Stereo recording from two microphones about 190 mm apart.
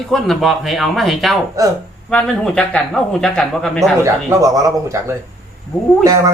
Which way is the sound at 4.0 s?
15° right (ahead or behind).